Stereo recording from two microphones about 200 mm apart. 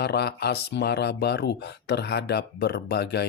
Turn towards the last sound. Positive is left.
turn(degrees=55)  # may be behind; listen again after turning